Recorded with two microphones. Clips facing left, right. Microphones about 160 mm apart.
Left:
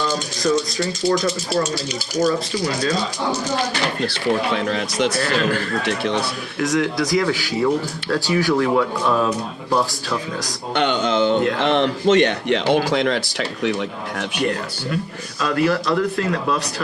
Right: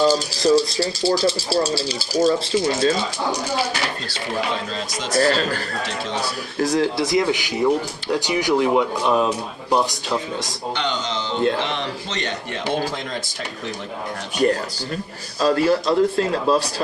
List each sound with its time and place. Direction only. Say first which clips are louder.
0.0 s speech: right 4 dB; 35° right (ahead or behind)
4.0 s speech: left 5 dB; 65° left (ahead or behind)
5.2 s speech: right 1 dB; 35° right (ahead or behind); by 10.2 s 20° right (ahead or behind)
10.8 s a sound: left 9 dB; 55° left (ahead or behind)
11.6 s a man's voice: left 9 dB; 60° left (ahead or behind); by 13.7 s 75° left (ahead or behind)
15.4 s speech: right 2 dB; 30° right (ahead or behind)